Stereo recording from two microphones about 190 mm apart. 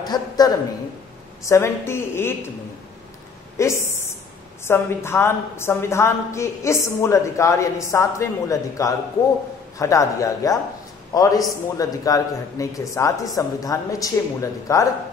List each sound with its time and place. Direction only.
0.0 s a man's voice: 20° left (ahead or behind)
3.5 s a woman's voice: 15° left (ahead or behind)